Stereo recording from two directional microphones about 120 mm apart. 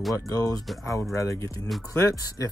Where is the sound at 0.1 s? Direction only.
30° left (ahead or behind).